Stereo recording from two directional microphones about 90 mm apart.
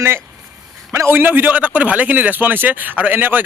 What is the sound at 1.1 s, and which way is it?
Speech, 20° right (ahead or behind).